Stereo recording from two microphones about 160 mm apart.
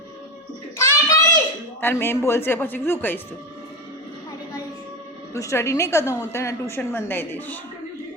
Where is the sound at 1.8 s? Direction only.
15° left (ahead or behind).